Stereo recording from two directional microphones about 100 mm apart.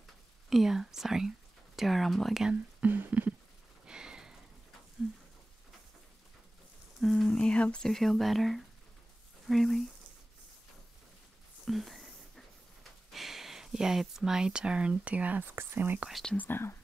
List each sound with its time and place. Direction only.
0.5 s speech: centre (ahead or behind)
2.5 s speech: 15° right (ahead or behind)
3.8 s a sound: 10° right (ahead or behind)
7.0 s speech: centre (ahead or behind)
11.6 s whispering: centre (ahead or behind)
13.1 s speech: centre (ahead or behind); by 16.1 s 20° right (ahead or behind)
16.1 s speech: 5° left (ahead or behind)
16.3 s speech: 20° left (ahead or behind)